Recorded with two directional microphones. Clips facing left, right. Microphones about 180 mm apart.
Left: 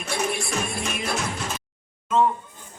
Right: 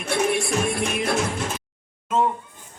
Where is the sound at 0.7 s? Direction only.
65° right (ahead or behind).